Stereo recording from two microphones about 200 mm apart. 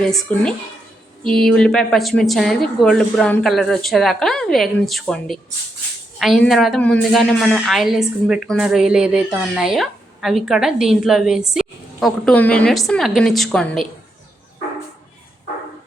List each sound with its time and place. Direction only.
0.0 s a woman's voice: 5° left (ahead or behind)